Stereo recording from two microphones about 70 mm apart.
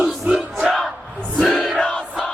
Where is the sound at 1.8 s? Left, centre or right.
Centre.